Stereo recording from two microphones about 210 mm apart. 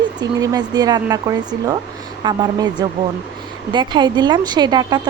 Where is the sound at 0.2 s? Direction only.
20° right (ahead or behind).